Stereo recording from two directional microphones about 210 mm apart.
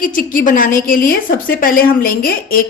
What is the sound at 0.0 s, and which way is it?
A woman's voice, 40° left (ahead or behind).